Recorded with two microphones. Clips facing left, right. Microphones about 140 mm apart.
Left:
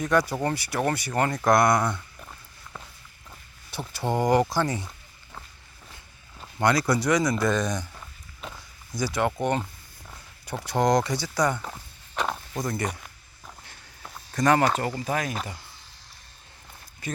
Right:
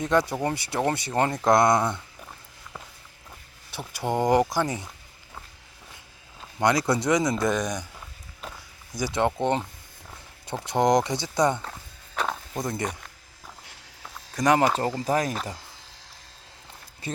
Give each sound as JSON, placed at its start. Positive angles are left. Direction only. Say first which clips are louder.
{"t": 0.0, "sound": "speech", "louder": "even", "side_deg": -25}
{"t": 3.9, "sound": "speech", "louder": "even", "side_deg": -15}
{"t": 6.6, "sound": "speech", "louder": "even", "side_deg": -20}
{"t": 9.0, "sound": "speech", "louder": "right 1 dB", "side_deg": -20}
{"t": 12.1, "sound": "walk", "louder": "even", "side_deg": 0}
{"t": 12.5, "sound": "speech", "louder": "even", "side_deg": -20}
{"t": 14.3, "sound": "speech", "louder": "even", "side_deg": -15}
{"t": 14.8, "sound": "speech", "louder": "right 3 dB", "side_deg": -35}